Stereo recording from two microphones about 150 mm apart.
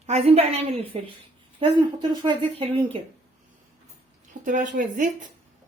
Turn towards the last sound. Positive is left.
turn(degrees=-60)  # may be behind; listen again after turning